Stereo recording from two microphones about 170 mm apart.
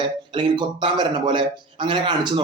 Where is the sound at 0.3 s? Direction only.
30° right (ahead or behind).